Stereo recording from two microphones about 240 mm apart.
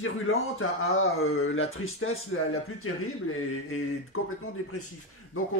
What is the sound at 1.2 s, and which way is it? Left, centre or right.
Speech, left.